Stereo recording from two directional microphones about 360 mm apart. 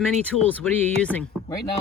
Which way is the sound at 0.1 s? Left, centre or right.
Centre.